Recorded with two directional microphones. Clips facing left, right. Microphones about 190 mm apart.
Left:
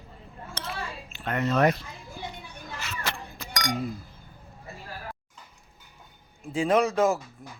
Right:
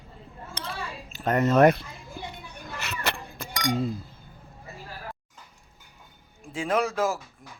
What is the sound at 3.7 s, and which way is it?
Speech, 25° right (ahead or behind).